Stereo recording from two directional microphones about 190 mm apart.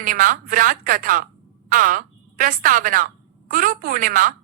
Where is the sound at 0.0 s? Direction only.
45° right (ahead or behind).